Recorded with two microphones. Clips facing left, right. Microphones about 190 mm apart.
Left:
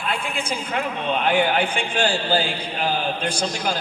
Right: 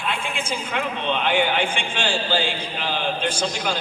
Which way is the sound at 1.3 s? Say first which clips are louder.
Left 2 dB; 35° left (ahead or behind).